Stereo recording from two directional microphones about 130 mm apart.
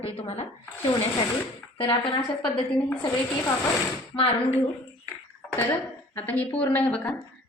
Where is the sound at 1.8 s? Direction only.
45° left (ahead or behind).